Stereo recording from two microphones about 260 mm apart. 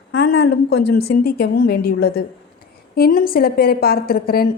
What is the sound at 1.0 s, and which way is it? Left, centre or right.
Speech, left.